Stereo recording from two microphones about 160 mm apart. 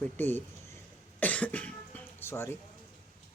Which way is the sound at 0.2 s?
10° left (ahead or behind).